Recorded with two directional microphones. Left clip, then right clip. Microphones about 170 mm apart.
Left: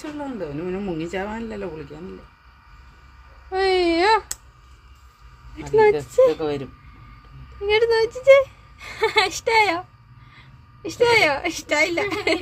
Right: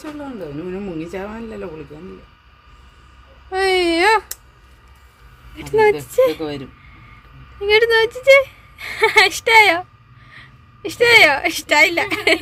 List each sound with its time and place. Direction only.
0.7 s speech: 20° left (ahead or behind)
3.5 s a sound: centre (ahead or behind)
5.5 s speech: centre (ahead or behind)
7.6 s speech: 5° left (ahead or behind)
10.8 s speech: centre (ahead or behind)